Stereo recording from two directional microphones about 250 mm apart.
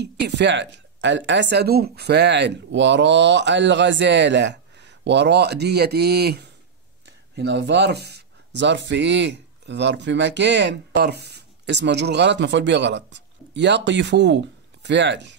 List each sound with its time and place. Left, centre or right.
0.0 s speech: right